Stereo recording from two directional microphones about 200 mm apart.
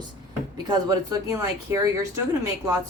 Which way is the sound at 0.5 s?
20° right (ahead or behind).